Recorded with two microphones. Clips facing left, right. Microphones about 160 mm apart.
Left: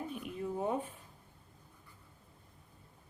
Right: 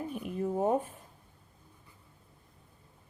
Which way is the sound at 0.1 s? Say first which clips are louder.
Right 5 dB; 50° right (ahead or behind).